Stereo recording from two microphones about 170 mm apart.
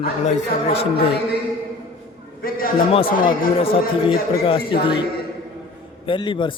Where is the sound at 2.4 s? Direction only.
55° left (ahead or behind).